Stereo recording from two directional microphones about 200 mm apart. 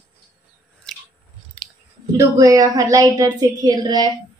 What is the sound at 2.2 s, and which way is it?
A woman's voice, 15° right (ahead or behind).